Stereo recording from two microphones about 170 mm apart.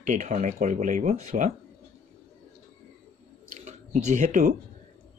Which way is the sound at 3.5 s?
45° right (ahead or behind).